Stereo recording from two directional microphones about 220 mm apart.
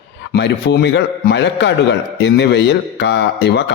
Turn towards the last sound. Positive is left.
turn(degrees=50)  # may be behind; listen again after turning